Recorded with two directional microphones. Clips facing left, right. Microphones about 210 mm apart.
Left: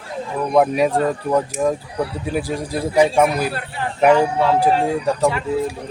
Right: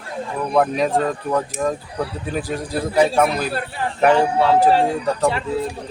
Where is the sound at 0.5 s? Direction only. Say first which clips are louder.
Left 2 dB; 10° left (ahead or behind).